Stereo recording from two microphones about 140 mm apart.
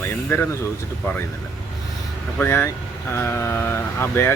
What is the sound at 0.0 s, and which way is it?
Speech, 15° left (ahead or behind).